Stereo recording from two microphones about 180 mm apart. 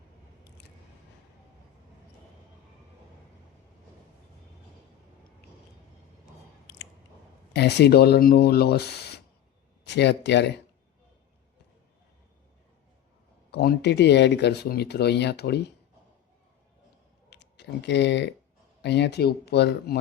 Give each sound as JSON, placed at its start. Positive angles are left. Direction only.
{"t": 7.5, "sound": "speech", "side_deg": 70}
{"t": 13.5, "sound": "speech", "side_deg": 65}
{"t": 17.2, "sound": "a sound", "side_deg": 75}
{"t": 18.8, "sound": "speech", "side_deg": 70}